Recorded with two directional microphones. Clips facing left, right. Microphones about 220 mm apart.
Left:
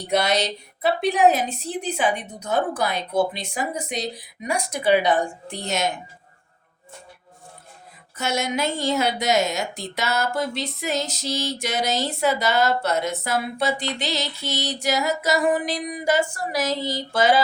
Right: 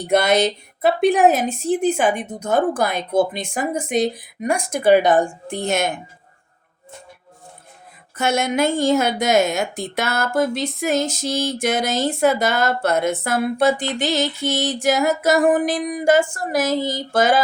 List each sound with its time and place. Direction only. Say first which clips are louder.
0.1 s a woman's voice: right 5 dB; 50° right (ahead or behind)
8.1 s a woman's voice: right 5 dB; 55° right (ahead or behind)